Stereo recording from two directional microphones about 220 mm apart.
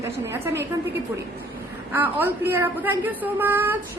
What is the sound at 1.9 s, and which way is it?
A woman's voice, 10° right (ahead or behind).